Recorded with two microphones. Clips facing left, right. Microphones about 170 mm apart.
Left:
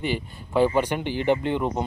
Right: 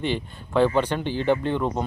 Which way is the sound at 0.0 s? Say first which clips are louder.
Right 1 dB; 10° left (ahead or behind).